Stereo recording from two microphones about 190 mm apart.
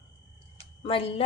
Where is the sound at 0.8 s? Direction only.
30° left (ahead or behind).